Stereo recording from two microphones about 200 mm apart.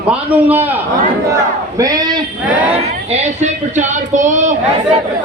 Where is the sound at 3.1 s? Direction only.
35° right (ahead or behind).